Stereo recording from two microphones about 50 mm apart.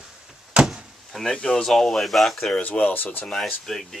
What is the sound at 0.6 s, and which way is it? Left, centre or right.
Door, centre.